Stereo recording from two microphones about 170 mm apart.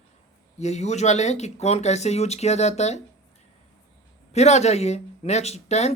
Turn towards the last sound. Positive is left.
turn(degrees=40)  # may be behind; listen again after turning